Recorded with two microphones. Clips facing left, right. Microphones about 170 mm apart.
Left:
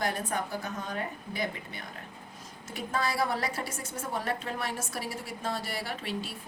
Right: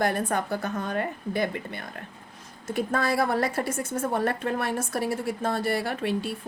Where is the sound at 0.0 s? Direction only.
60° right (ahead or behind).